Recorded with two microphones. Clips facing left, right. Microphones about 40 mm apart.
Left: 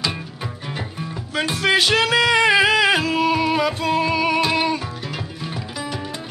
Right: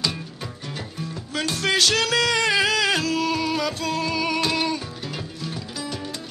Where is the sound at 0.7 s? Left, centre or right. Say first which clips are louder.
Left 3 dB; left.